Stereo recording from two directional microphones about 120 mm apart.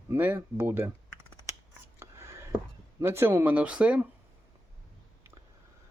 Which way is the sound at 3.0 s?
20° right (ahead or behind).